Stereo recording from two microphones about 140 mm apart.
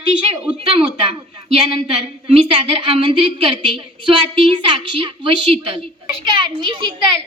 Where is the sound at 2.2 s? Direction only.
40° right (ahead or behind).